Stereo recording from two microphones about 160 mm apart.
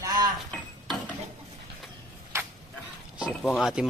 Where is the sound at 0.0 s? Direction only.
25° right (ahead or behind).